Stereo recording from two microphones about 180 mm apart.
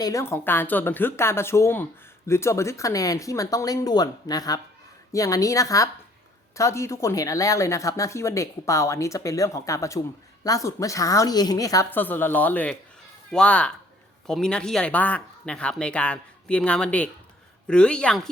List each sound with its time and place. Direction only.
0.0 s a woman's voice: 15° left (ahead or behind)